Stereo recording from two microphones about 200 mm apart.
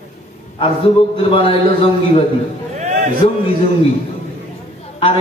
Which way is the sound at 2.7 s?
35° right (ahead or behind).